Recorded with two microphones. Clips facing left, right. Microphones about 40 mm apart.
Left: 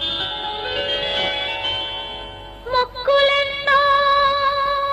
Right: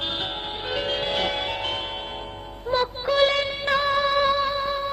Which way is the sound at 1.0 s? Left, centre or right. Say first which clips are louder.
Left 3 dB; left.